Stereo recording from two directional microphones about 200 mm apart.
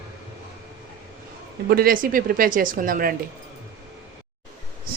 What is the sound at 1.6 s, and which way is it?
Speech, 50° right (ahead or behind).